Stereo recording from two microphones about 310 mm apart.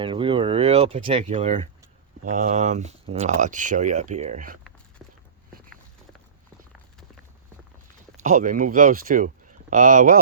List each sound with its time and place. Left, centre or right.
0.0 s speech: centre
5.0 s walk: centre
8.2 s speech: right